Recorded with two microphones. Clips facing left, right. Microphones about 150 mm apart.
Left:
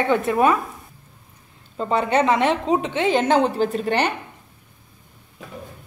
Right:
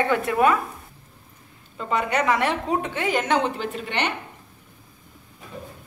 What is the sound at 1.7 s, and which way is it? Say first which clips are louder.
A woman's voice: left 4 dB; 30° left (ahead or behind).